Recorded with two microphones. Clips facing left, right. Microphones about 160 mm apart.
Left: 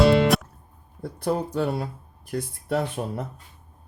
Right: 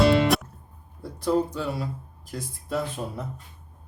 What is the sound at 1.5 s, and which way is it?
Speech, 55° left (ahead or behind).